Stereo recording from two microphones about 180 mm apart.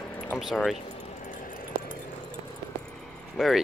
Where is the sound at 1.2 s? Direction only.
45° left (ahead or behind).